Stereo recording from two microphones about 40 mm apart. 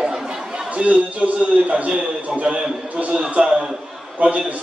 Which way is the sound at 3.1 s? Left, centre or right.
Right.